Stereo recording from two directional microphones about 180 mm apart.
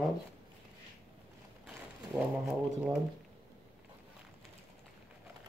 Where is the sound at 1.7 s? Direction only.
5° right (ahead or behind).